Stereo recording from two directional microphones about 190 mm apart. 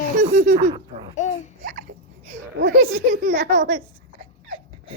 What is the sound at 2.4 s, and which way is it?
Speech, 75° right (ahead or behind).